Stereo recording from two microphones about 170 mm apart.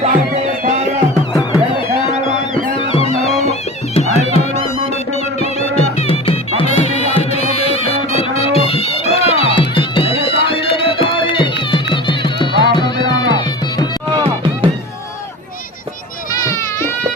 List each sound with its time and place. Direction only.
0.0 s music: 40° right (ahead or behind)
2.7 s music: 35° left (ahead or behind)
14.3 s music: 30° right (ahead or behind)
16.3 s children playing: 20° left (ahead or behind)